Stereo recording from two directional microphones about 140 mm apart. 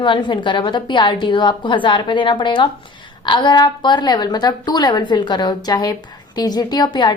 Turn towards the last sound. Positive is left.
turn(degrees=30)  # may be behind; listen again after turning